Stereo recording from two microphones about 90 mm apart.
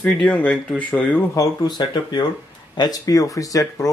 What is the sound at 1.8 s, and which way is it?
Speech, 50° left (ahead or behind).